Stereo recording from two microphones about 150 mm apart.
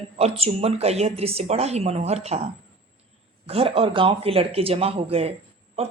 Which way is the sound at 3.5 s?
40° right (ahead or behind).